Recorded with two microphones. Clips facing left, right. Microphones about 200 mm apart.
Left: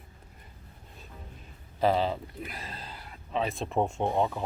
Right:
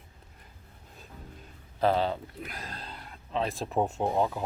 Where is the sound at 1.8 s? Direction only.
Centre (ahead or behind).